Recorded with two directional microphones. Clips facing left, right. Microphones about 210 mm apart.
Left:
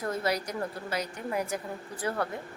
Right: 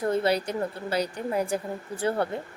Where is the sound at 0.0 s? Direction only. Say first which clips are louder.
Right 6 dB; 30° right (ahead or behind).